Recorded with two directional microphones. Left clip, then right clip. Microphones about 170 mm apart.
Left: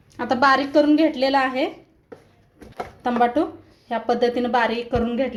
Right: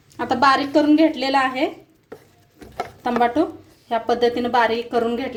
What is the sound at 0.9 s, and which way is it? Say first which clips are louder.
Speech: right 1 dB; 25° left (ahead or behind).